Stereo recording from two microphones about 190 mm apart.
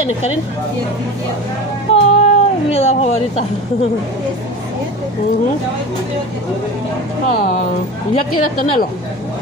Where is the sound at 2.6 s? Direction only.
35° left (ahead or behind).